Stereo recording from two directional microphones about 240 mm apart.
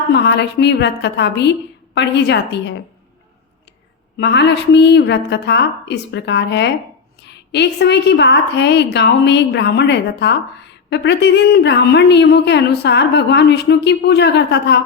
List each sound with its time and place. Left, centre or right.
0.1 s a woman's voice: left
4.2 s a woman's voice: left